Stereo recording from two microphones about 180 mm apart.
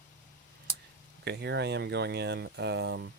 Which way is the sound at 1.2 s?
70° right (ahead or behind).